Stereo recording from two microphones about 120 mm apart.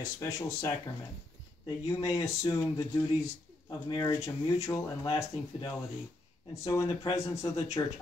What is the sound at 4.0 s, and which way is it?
Speech, 25° left (ahead or behind).